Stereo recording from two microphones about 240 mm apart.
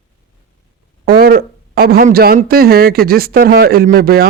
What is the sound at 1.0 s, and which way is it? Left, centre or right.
Speech, right.